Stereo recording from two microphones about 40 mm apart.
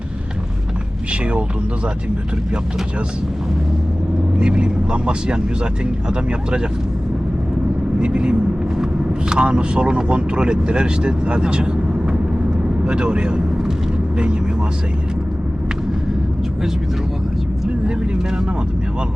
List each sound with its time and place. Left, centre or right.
4.4 s speech: right
8.0 s speech: right
12.8 s speech: right